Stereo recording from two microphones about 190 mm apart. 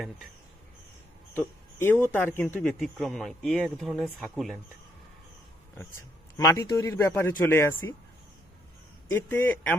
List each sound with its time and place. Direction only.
1.3 s speech: 10° left (ahead or behind)
6.3 s a man's voice: 15° left (ahead or behind)
9.0 s a man's voice: 10° left (ahead or behind)